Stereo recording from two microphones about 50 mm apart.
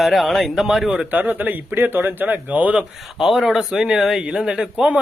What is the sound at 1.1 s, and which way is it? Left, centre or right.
Speech, right.